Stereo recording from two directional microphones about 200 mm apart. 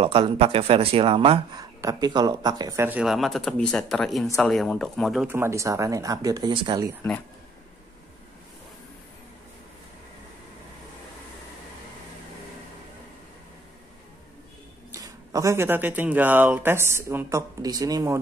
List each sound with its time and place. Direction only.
0.0 s speech: 30° right (ahead or behind); by 5.3 s centre (ahead or behind)
5.3 s speech: 15° right (ahead or behind)
14.9 s speech: 15° right (ahead or behind)